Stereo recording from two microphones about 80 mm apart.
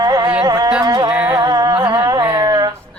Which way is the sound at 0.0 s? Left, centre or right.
Right.